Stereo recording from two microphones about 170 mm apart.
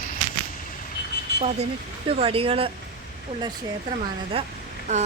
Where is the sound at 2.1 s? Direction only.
35° right (ahead or behind).